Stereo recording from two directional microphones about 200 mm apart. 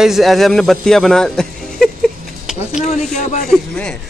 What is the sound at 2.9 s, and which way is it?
Speech, 35° left (ahead or behind).